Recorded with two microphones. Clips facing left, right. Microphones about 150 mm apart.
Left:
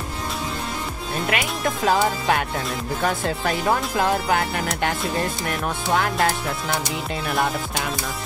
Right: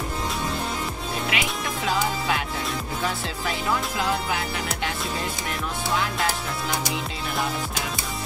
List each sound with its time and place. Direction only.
1.3 s speech: 50° left (ahead or behind)
5.9 s speech: 50° left (ahead or behind)